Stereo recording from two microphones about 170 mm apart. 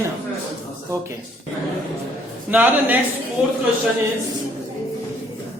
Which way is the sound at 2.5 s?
10° right (ahead or behind).